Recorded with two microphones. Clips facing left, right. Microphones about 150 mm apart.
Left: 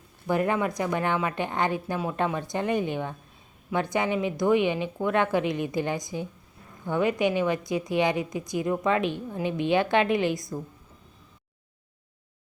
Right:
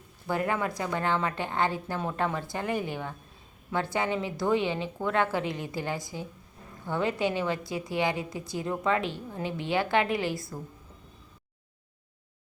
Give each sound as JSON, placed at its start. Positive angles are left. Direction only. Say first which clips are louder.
{"t": 0.3, "sound": "a woman's voice", "louder": "left 4 dB", "side_deg": 20}